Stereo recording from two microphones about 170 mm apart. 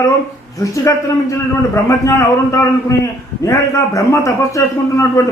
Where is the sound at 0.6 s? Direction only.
20° left (ahead or behind).